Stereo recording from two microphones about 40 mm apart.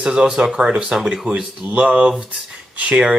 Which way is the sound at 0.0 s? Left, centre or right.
Centre.